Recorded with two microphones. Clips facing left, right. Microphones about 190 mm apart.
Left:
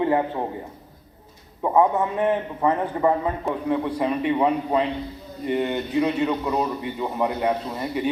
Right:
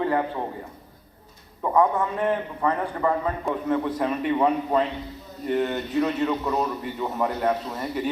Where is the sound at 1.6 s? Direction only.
20° left (ahead or behind).